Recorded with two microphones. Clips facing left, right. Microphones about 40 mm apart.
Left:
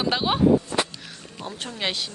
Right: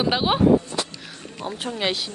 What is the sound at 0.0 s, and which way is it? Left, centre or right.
Speech, centre.